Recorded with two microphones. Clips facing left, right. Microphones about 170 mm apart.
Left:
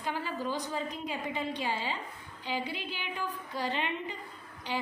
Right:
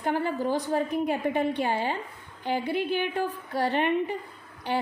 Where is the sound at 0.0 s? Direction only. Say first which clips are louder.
Right 8 dB; 55° right (ahead or behind).